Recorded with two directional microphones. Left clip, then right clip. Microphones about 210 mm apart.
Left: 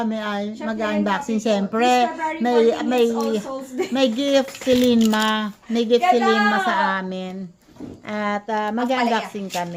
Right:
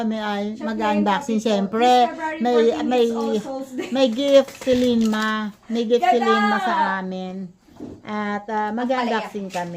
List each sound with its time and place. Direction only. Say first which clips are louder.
0.0 s a woman's voice: even; 5° right (ahead or behind)